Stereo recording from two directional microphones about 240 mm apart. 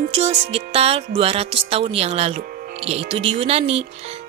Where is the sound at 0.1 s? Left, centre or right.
Right.